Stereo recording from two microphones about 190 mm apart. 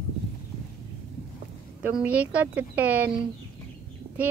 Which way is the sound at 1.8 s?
10° right (ahead or behind).